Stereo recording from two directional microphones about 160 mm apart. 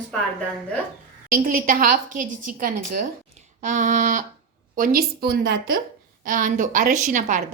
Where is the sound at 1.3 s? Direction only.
60° right (ahead or behind).